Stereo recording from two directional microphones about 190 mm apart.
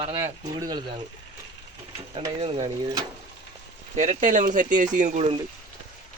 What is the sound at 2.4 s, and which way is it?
Speech, 30° right (ahead or behind).